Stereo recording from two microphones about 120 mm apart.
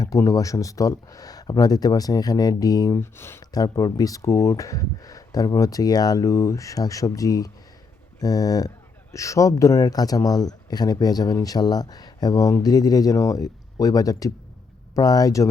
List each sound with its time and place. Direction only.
0.0 s speech: 30° left (ahead or behind)
3.0 s speech: 20° left (ahead or behind)
3.5 s speech: 30° left (ahead or behind)